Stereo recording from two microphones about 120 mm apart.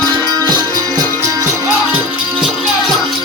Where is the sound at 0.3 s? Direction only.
35° right (ahead or behind).